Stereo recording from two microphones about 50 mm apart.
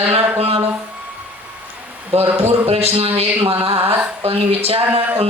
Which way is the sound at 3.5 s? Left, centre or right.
Right.